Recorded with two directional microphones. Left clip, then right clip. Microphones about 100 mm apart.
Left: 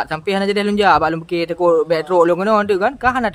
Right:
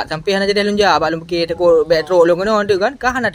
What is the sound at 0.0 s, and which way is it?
Speech, 5° left (ahead or behind).